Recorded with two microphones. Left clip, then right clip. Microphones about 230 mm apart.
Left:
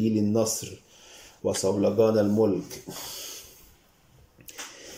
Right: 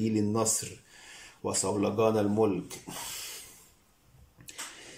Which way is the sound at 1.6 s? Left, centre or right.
Centre.